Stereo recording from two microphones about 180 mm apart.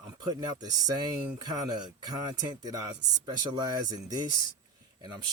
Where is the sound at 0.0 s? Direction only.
20° right (ahead or behind).